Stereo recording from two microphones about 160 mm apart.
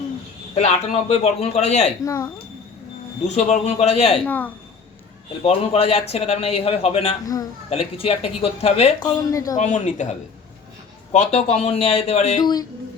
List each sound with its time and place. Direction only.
0.5 s speech: 40° left (ahead or behind)
2.0 s speech: 20° left (ahead or behind)
3.2 s speech: 45° left (ahead or behind)
4.3 s a woman's voice: 10° left (ahead or behind)
5.4 s speech: 40° left (ahead or behind)
9.0 s speech: 25° left (ahead or behind)
9.6 s a man's voice: 50° left (ahead or behind)
12.4 s speech: 25° left (ahead or behind)